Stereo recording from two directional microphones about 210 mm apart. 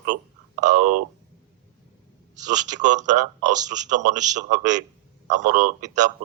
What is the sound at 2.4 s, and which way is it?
A man's voice, 35° right (ahead or behind).